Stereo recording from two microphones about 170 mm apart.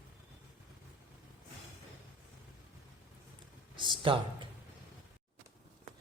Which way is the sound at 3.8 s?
30° right (ahead or behind).